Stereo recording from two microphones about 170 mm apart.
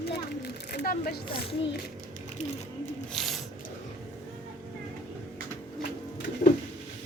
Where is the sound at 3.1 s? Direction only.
Centre (ahead or behind).